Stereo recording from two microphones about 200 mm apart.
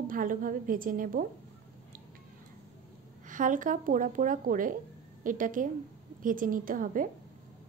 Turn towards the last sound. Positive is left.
turn(degrees=-45)  # may be behind; listen again after turning